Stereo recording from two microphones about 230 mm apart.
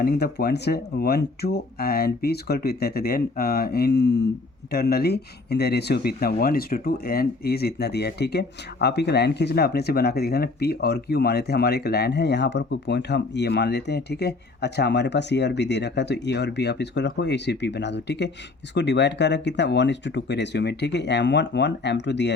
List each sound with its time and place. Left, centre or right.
0.0 s speech: left